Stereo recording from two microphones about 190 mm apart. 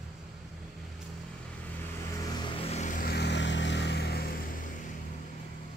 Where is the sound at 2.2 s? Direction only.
25° left (ahead or behind); by 4.4 s 55° left (ahead or behind).